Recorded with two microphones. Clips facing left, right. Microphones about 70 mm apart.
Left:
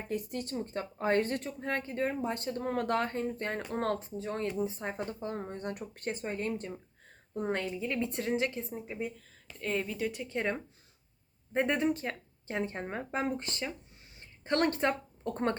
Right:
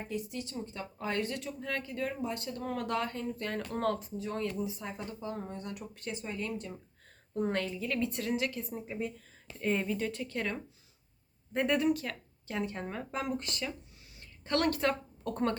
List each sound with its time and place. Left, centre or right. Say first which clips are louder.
0.1 s speech: left 5 dB; left
7.3 s a woman's voice: right 1 dB; centre
9.6 s speech: right 2 dB; centre
10.1 s a woman's voice: left 2 dB; centre